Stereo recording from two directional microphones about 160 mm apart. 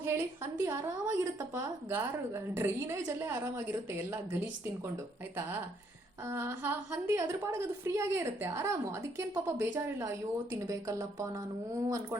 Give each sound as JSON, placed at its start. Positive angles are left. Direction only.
{"t": 0.0, "sound": "a woman's voice", "side_deg": -15}
{"t": 6.2, "sound": "a woman's voice", "side_deg": -15}